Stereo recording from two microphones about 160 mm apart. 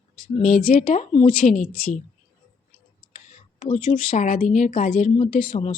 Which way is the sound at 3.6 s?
50° left (ahead or behind).